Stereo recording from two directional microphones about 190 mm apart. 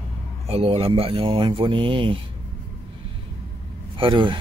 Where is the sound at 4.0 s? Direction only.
25° right (ahead or behind).